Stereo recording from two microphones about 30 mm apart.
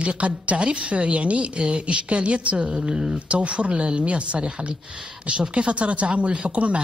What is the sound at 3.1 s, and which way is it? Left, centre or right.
Speech, right.